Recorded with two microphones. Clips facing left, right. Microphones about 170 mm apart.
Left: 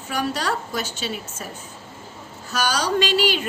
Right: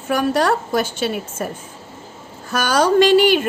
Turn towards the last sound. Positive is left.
turn(degrees=-50)  # may be behind; listen again after turning